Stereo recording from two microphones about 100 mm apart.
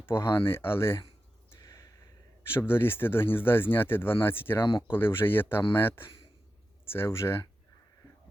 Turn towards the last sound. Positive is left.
turn(degrees=25)  # may be behind; listen again after turning